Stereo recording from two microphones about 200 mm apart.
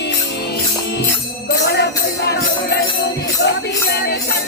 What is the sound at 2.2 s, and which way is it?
Music, 55° left (ahead or behind).